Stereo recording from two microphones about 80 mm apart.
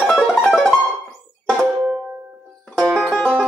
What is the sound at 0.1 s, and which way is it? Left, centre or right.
Music, centre.